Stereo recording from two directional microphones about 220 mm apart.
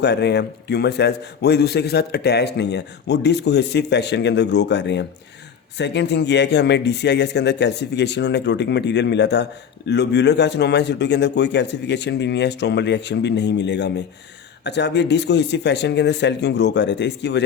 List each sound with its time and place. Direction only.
0.0 s speech: 50° left (ahead or behind)